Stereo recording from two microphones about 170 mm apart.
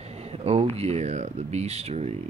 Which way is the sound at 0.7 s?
40° right (ahead or behind).